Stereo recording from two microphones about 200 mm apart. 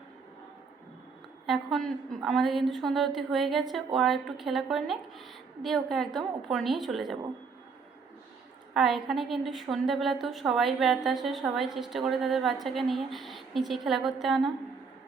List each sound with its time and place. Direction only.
1.5 s a woman's voice: centre (ahead or behind)
8.7 s a woman's voice: centre (ahead or behind)